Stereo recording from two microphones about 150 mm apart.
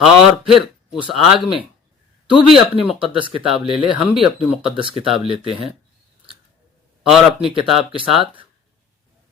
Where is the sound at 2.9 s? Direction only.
35° right (ahead or behind).